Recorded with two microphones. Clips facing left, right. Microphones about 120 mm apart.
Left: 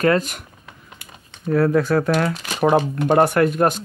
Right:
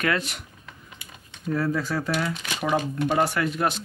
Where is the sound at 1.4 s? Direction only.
65° left (ahead or behind).